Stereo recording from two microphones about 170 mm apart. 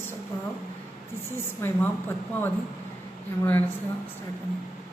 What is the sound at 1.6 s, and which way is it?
Speech, 15° left (ahead or behind).